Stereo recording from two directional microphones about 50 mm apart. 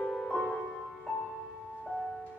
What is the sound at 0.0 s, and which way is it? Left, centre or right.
Music, centre.